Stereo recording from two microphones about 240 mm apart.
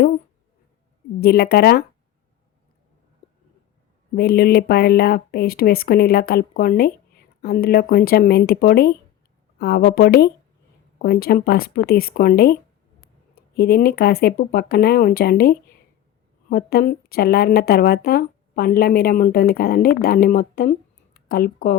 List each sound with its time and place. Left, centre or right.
1.2 s speech: left
4.1 s speech: left